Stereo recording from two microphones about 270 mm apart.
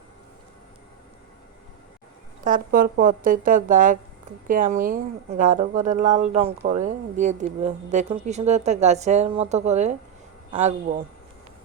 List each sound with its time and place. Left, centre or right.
2.4 s speech: right